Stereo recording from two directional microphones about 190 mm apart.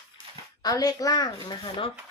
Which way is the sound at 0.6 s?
20° left (ahead or behind).